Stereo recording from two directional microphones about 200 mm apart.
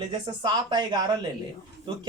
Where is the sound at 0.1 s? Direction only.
20° right (ahead or behind).